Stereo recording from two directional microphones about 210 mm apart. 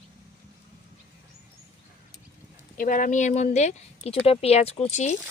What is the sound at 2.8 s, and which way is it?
Speech, 40° left (ahead or behind).